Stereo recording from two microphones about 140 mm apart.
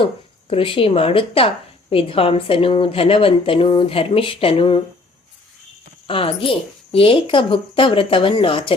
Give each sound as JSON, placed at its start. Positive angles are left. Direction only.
{"t": 0.0, "sound": "a woman's voice", "side_deg": 40}
{"t": 6.1, "sound": "a woman's voice", "side_deg": 40}